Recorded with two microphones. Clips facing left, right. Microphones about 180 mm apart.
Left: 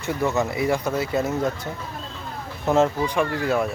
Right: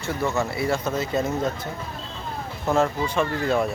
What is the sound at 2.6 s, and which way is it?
Speech, 20° left (ahead or behind).